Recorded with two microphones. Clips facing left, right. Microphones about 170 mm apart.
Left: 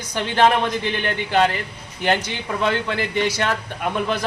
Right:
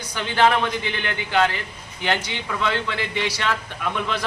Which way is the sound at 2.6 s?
45° left (ahead or behind).